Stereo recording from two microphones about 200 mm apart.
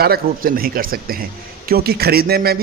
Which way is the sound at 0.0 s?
50° right (ahead or behind).